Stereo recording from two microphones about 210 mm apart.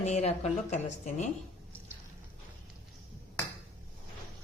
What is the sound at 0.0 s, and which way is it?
Speech, 30° left (ahead or behind).